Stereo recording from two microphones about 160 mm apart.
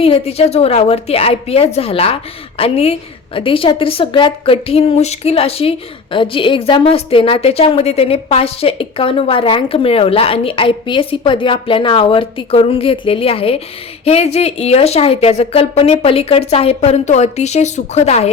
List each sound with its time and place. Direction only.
0.0 s a woman's voice: 40° left (ahead or behind)